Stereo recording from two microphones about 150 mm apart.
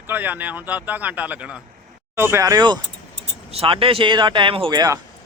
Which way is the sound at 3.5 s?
40° right (ahead or behind).